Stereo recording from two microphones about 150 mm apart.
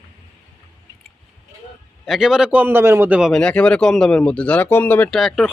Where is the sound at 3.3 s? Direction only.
5° left (ahead or behind).